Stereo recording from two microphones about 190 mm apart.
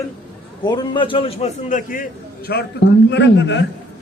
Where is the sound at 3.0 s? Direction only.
65° left (ahead or behind).